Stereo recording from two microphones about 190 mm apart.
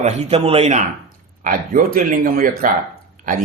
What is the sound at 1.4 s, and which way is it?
A man's voice, 45° right (ahead or behind).